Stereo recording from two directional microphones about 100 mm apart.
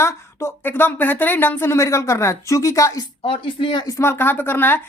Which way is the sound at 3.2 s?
60° left (ahead or behind).